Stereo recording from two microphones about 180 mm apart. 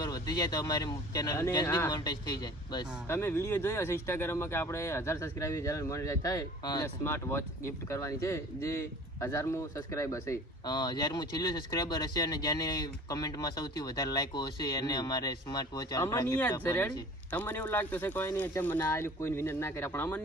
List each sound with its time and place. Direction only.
0.0 s speech: 20° left (ahead or behind)